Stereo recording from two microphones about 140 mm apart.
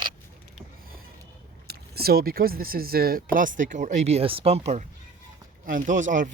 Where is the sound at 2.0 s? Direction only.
90° right.